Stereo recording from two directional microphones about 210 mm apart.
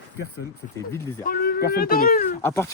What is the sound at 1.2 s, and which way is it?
Speech, 45° left (ahead or behind).